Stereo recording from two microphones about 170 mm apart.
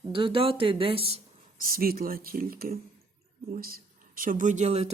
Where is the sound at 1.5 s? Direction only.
55° right (ahead or behind).